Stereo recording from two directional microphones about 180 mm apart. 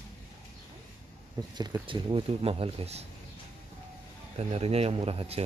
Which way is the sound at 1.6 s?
25° right (ahead or behind).